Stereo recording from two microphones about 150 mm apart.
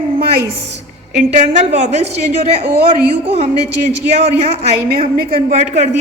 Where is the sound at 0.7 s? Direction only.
50° right (ahead or behind).